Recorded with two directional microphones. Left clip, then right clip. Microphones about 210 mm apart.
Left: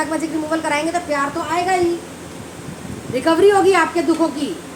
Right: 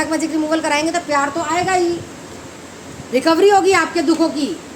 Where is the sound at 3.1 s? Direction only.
45° right (ahead or behind).